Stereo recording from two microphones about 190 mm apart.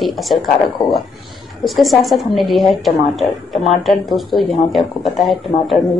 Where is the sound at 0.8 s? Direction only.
20° left (ahead or behind).